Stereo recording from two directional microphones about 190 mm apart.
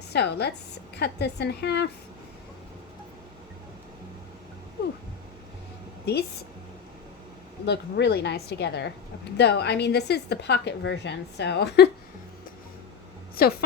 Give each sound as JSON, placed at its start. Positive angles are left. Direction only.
{"t": 0.1, "sound": "a woman's voice", "side_deg": 60}
{"t": 7.6, "sound": "a woman's voice", "side_deg": 60}
{"t": 13.4, "sound": "a woman's voice", "side_deg": 55}